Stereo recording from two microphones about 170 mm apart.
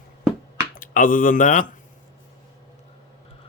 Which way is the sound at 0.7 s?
50° left (ahead or behind).